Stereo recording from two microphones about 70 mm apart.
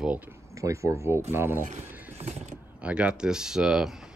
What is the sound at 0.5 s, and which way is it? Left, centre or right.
Speech, right.